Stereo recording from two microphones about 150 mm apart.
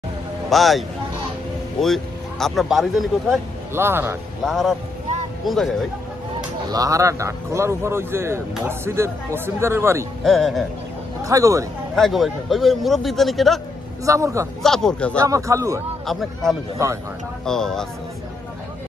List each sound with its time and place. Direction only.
0.5 s a man's voice: centre (ahead or behind)
3.7 s speech: 15° right (ahead or behind)
4.5 s a man's voice: centre (ahead or behind)
6.7 s speech: 25° right (ahead or behind)
10.2 s a man's voice: centre (ahead or behind)
11.2 s speech: 20° right (ahead or behind)
11.9 s a man's voice: centre (ahead or behind)
14.0 s speech: 20° right (ahead or behind)
14.6 s a man's voice: 5° left (ahead or behind)
15.1 s speech: 20° right (ahead or behind)
16.1 s a man's voice: centre (ahead or behind)
16.7 s speech: 20° right (ahead or behind)
17.5 s a man's voice: 5° left (ahead or behind)